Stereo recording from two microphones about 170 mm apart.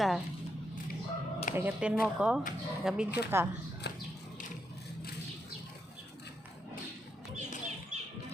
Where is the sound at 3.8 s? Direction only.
75° left (ahead or behind).